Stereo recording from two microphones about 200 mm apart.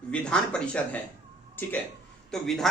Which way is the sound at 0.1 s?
5° left (ahead or behind).